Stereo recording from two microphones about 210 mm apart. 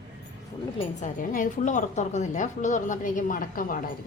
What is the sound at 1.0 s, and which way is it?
A woman's voice, 40° left (ahead or behind).